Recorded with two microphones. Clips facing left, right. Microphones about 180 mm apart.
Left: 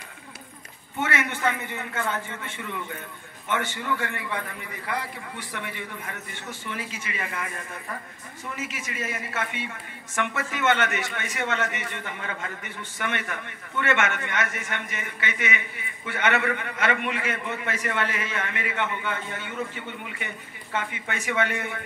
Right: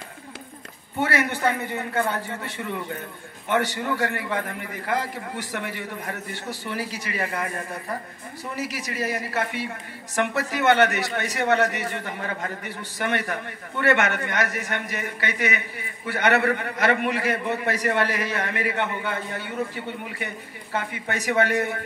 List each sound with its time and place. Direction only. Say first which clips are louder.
0.9 s a man's voice: right 4 dB; 35° right (ahead or behind)